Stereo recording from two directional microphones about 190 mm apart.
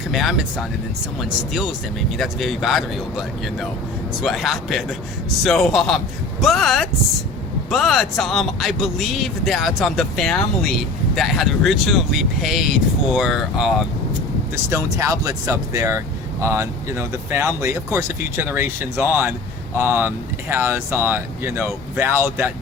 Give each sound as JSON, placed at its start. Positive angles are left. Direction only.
{"t": 0.1, "sound": "speech", "side_deg": 0}
{"t": 14.5, "sound": "speech", "side_deg": -15}